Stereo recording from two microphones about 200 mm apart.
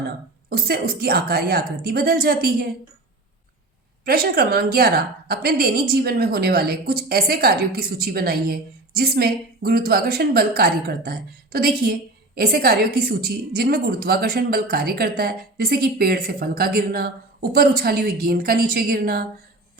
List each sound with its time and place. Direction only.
0.5 s a woman's voice: 50° right (ahead or behind)
4.0 s a woman's voice: 50° right (ahead or behind)